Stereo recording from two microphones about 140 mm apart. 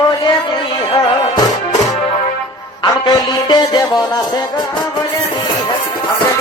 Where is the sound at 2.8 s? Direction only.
30° left (ahead or behind).